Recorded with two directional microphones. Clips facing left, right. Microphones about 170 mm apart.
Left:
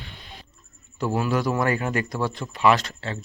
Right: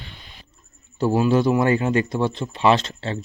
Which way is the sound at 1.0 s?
25° right (ahead or behind).